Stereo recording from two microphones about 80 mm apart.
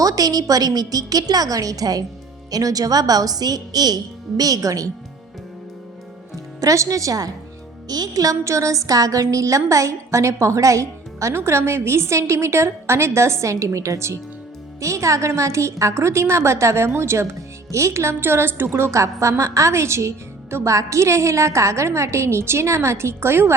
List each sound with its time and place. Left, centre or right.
0.0 s a woman's voice: right
6.6 s a woman's voice: right